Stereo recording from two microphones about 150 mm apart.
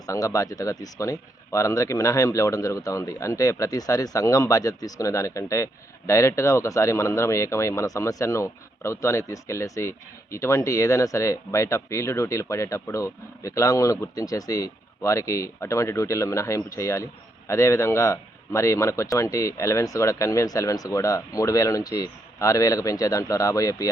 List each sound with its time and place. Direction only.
0.1 s speech: 20° left (ahead or behind)